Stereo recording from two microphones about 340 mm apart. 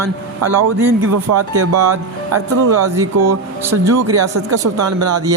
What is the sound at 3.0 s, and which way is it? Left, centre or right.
Speech, right.